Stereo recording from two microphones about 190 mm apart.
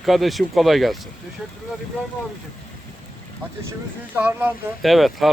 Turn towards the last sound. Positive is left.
turn(degrees=0)  # may be behind; listen again after turning